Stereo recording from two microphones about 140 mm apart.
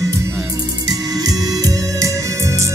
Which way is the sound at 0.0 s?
20° right (ahead or behind).